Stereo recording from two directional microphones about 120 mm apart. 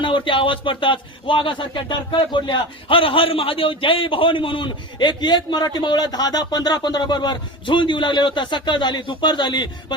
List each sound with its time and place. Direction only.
0.0 s speech: 45° left (ahead or behind)